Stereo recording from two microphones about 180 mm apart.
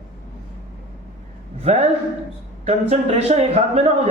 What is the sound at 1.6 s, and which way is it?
A man's voice, 35° right (ahead or behind).